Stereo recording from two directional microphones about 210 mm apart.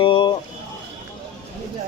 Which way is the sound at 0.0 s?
25° left (ahead or behind).